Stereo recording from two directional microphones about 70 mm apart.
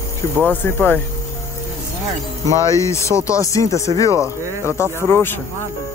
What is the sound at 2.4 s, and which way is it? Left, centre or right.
Speech, left.